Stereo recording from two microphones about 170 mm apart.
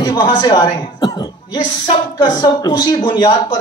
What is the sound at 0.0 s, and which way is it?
Speech, 20° left (ahead or behind).